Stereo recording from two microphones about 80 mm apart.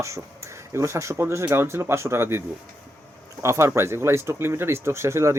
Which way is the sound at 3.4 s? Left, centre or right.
Right.